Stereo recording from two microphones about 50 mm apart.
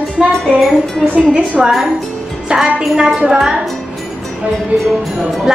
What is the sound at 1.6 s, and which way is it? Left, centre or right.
A woman's voice, centre.